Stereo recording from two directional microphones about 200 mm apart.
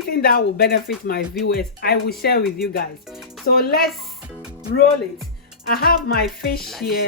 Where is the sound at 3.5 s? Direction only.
50° left (ahead or behind).